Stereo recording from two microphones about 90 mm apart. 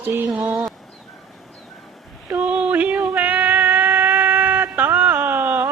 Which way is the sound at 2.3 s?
15° right (ahead or behind).